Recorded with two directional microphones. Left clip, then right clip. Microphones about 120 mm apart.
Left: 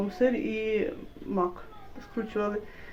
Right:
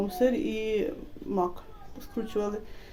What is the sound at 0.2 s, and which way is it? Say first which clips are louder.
Speech: even; 25° right (ahead or behind).